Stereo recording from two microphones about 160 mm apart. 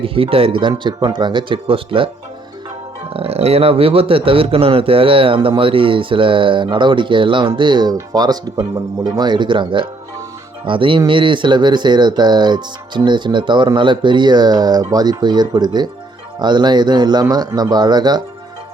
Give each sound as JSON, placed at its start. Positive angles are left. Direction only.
{"t": 0.0, "sound": "speech", "side_deg": -35}
{"t": 3.1, "sound": "speech", "side_deg": -35}